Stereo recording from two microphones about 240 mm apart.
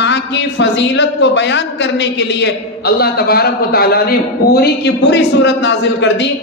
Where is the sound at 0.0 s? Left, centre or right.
Left.